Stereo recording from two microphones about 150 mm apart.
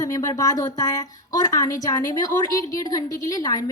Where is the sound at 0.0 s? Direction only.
20° left (ahead or behind).